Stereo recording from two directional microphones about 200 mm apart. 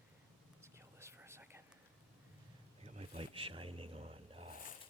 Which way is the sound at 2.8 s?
30° right (ahead or behind).